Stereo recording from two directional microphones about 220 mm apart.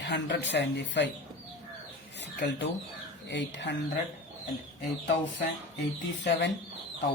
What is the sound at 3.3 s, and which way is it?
Speech, 55° left (ahead or behind).